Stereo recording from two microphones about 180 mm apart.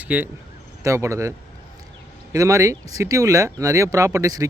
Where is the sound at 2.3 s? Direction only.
15° right (ahead or behind).